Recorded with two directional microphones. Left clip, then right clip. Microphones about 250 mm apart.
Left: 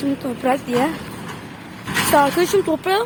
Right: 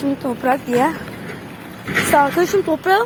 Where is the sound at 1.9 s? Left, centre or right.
Centre.